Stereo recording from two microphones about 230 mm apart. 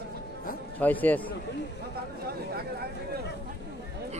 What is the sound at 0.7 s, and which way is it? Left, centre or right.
Speech, centre.